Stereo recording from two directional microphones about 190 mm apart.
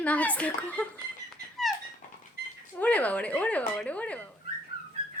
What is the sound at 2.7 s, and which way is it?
Speech, 10° left (ahead or behind).